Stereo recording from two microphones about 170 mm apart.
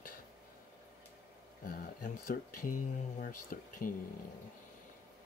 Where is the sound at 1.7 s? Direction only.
50° left (ahead or behind).